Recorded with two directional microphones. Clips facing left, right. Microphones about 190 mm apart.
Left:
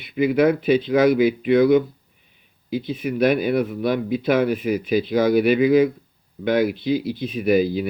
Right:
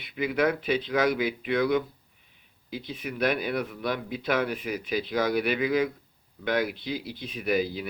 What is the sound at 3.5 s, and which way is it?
Speech, 20° left (ahead or behind).